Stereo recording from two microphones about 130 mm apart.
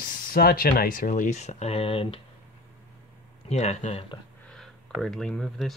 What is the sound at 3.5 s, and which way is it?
Speech, 60° left (ahead or behind).